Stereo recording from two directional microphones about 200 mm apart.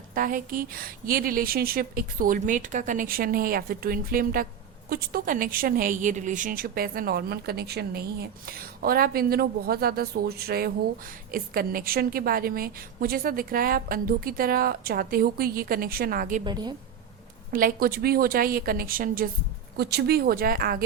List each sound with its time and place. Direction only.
0.1 s a woman's voice: 45° right (ahead or behind)
16.4 s a woman's voice: 20° right (ahead or behind)
17.5 s a woman's voice: 45° right (ahead or behind)